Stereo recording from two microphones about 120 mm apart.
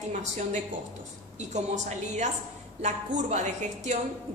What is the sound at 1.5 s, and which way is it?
Speech, 80° right.